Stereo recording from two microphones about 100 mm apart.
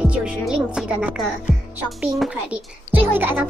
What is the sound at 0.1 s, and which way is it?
Speech, 10° right (ahead or behind).